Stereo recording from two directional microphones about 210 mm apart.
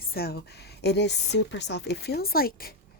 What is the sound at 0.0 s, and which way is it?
A woman's voice, 45° left (ahead or behind).